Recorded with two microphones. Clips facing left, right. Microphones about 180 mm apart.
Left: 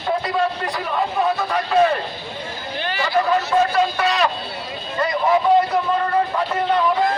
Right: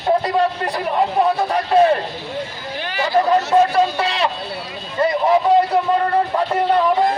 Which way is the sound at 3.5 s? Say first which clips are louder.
Right 3 dB; 35° right (ahead or behind).